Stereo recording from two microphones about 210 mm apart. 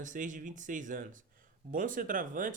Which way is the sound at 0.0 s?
35° right (ahead or behind).